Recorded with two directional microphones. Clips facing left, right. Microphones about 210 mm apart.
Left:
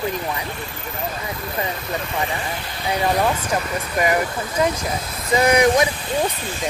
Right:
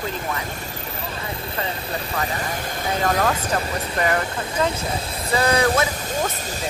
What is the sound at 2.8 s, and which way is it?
Speech, 15° left (ahead or behind).